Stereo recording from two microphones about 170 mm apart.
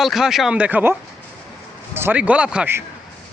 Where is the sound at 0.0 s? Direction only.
Centre (ahead or behind).